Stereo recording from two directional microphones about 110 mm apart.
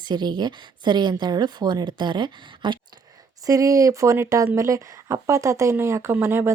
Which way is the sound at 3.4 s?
30° right (ahead or behind).